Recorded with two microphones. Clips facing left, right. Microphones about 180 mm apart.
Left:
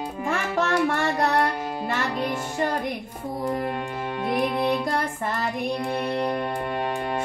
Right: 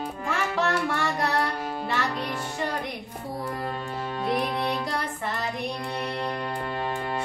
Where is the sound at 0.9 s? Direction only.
50° left (ahead or behind).